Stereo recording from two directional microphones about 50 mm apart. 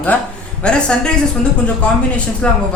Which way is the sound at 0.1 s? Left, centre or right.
Left.